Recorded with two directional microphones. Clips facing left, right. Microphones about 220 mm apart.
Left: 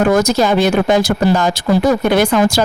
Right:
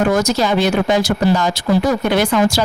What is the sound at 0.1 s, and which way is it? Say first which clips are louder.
Speech: left 3 dB; 50° left (ahead or behind).